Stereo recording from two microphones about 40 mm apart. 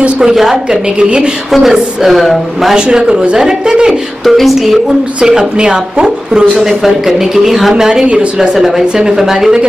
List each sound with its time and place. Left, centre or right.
0.2 s speech: centre
0.7 s speech: right
1.5 s speech: centre
2.7 s speech: right
4.2 s a woman's voice: centre
5.2 s speech: centre